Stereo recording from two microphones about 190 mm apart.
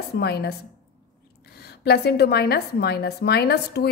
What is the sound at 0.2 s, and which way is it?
A woman's voice, 60° left (ahead or behind).